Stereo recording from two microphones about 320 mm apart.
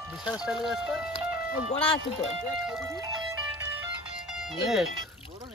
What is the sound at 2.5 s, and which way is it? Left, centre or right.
Speech, centre.